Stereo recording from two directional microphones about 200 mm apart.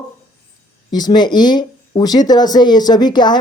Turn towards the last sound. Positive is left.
turn(degrees=20)  # may be behind; listen again after turning